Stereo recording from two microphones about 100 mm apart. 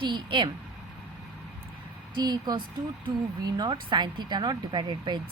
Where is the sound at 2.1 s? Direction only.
45° right (ahead or behind).